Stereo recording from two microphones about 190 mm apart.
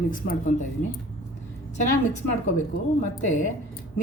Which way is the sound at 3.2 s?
40° left (ahead or behind).